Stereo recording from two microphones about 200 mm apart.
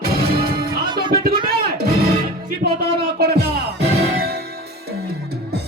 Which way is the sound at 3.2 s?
50° right (ahead or behind).